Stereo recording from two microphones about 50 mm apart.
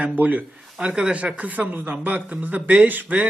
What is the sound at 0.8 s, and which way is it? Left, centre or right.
Speech, centre.